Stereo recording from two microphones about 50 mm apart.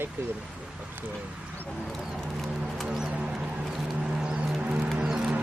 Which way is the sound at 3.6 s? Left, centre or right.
Centre.